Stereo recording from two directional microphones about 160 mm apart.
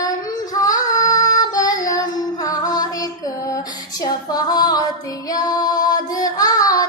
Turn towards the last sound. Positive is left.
turn(degrees=25)  # may be behind; listen again after turning